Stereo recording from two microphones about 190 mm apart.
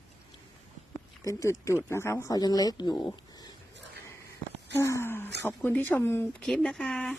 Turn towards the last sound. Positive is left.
turn(degrees=5)  # may be behind; listen again after turning